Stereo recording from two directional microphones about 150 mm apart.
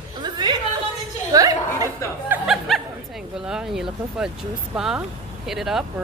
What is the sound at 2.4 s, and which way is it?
Speech, centre (ahead or behind).